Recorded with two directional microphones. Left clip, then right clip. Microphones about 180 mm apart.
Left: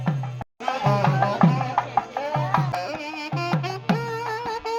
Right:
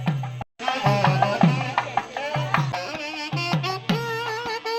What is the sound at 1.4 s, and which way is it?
Music, 25° right (ahead or behind).